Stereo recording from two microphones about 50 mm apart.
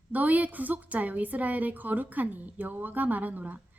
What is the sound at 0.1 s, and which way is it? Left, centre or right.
Speech, right.